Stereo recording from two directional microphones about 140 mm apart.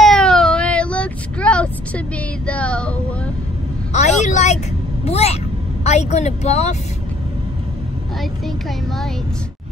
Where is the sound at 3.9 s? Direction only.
55° left (ahead or behind).